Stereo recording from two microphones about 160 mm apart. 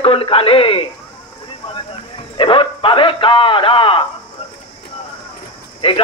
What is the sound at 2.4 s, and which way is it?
A man's voice, 35° left (ahead or behind).